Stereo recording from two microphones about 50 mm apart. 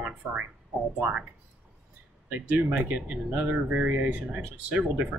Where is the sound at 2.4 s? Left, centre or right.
Right.